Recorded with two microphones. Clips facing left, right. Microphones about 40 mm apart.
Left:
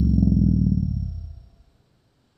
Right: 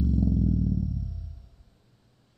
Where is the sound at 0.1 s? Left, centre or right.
Right.